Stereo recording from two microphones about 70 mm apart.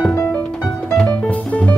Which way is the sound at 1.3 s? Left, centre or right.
Centre.